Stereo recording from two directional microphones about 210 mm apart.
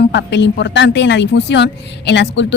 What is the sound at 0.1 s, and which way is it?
Speech, 55° left (ahead or behind).